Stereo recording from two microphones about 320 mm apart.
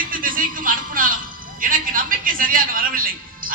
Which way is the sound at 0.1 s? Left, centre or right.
Right.